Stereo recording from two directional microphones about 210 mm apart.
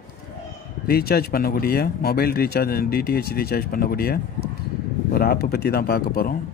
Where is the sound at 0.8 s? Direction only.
45° left (ahead or behind).